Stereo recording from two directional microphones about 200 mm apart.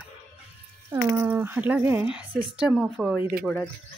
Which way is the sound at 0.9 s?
10° right (ahead or behind).